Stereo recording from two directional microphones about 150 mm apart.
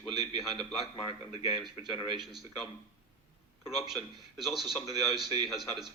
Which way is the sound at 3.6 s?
Centre (ahead or behind).